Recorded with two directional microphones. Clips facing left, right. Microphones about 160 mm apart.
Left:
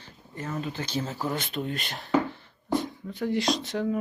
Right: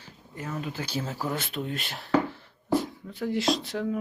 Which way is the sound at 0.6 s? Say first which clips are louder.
Left 1 dB; 5° right (ahead or behind).